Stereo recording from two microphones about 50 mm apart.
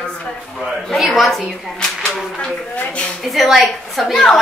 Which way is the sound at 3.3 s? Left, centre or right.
Centre.